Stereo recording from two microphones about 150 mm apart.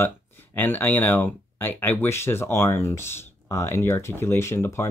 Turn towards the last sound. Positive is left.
turn(degrees=15)  # may be behind; listen again after turning